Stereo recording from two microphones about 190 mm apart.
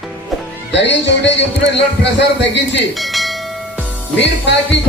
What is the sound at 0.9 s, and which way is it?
A man's voice, 70° left (ahead or behind).